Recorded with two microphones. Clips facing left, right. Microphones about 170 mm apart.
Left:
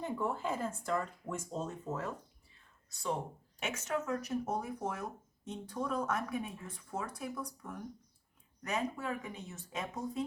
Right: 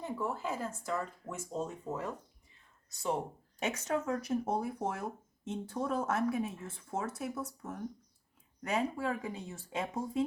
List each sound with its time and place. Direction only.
0.0 s speech: 5° right (ahead or behind)
3.6 s speech: 35° right (ahead or behind)